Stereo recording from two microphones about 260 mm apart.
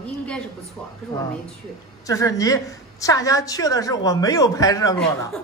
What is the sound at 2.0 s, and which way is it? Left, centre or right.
A man's voice, centre.